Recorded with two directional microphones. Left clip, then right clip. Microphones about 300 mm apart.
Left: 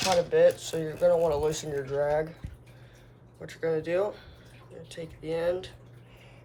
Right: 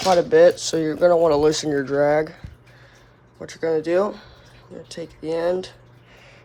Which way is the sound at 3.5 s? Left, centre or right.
Right.